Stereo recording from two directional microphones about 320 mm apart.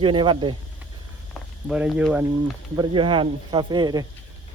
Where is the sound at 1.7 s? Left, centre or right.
Centre.